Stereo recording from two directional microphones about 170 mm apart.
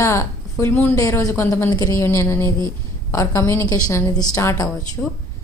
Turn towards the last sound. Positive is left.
turn(degrees=20)  # may be behind; listen again after turning